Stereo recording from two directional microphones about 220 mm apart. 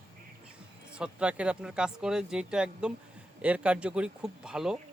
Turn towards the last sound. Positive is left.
turn(degrees=-5)  # may be behind; listen again after turning